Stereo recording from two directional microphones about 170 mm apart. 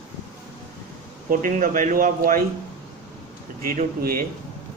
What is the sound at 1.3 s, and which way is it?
Speech, 50° right (ahead or behind).